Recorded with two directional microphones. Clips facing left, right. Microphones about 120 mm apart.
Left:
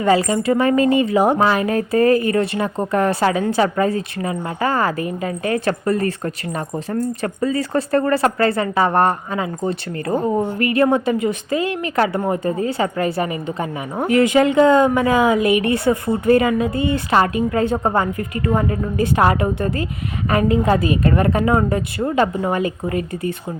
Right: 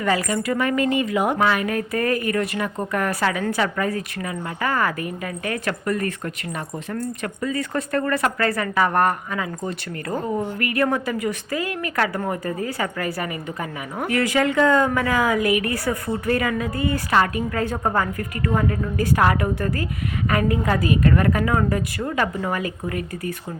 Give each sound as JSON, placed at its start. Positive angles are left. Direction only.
{"t": 0.0, "sound": "speech", "side_deg": 25}